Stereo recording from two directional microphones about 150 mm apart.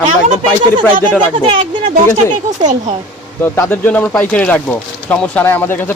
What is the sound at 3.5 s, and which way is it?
Speech, 15° left (ahead or behind).